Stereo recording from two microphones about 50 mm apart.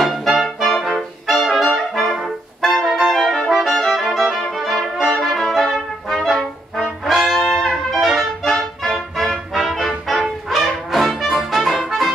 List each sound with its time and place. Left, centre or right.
0.0 s music: centre
0.8 s trumpet: centre
2.1 s brass instrument: centre
3.6 s music: centre
5.1 s brass instrument: centre
7.1 s trumpet: centre
8.5 s music: centre